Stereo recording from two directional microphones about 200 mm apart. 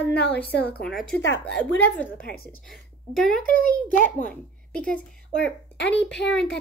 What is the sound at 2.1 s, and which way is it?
A woman's voice, 50° left (ahead or behind).